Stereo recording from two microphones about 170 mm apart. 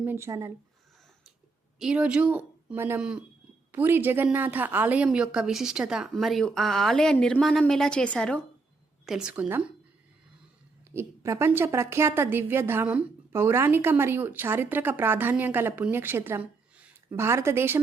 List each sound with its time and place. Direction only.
0.0 s a woman's voice: 15° right (ahead or behind)
1.8 s a woman's voice: 5° right (ahead or behind)
9.0 s a woman's voice: 5° right (ahead or behind)
10.9 s a woman's voice: 15° right (ahead or behind)